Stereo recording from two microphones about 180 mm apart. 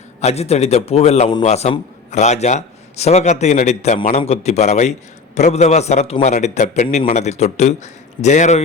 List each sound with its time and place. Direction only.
0.2 s a man's voice: 35° left (ahead or behind)